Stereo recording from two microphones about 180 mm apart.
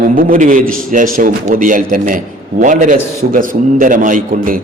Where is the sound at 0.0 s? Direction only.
50° right (ahead or behind).